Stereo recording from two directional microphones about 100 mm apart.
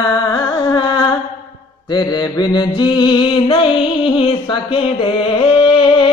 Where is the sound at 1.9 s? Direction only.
45° left (ahead or behind).